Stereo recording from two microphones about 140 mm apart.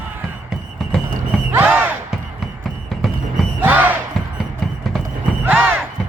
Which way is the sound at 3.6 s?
10° right (ahead or behind).